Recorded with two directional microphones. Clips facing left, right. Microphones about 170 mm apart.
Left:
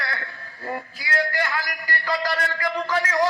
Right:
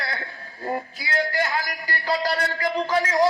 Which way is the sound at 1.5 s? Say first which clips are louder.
Right 1 dB; 35° right (ahead or behind).